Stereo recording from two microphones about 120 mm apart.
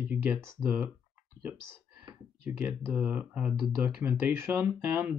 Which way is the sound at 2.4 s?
10° right (ahead or behind).